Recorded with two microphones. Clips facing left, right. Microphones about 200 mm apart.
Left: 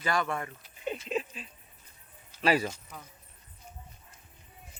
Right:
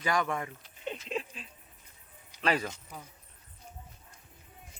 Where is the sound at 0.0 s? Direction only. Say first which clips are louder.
Even; 15° right (ahead or behind).